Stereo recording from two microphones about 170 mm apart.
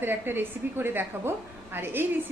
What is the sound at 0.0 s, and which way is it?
A woman's voice, 10° right (ahead or behind).